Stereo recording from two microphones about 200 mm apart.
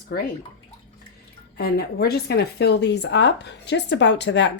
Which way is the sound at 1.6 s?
50° left (ahead or behind).